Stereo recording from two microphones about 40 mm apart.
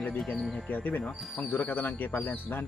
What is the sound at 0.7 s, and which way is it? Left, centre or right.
Speech, left.